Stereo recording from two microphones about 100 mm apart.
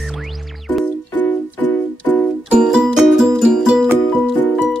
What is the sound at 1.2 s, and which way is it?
Music, 20° left (ahead or behind).